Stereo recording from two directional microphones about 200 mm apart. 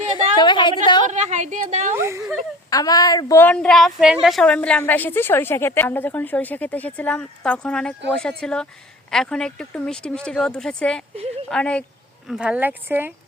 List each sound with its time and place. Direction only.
0.3 s a woman's voice: 25° left (ahead or behind)
1.0 s a woman's voice: 35° right (ahead or behind)
2.0 s a sound: 15° right (ahead or behind)
2.6 s a woman's voice: 20° left (ahead or behind); by 13.1 s 10° right (ahead or behind)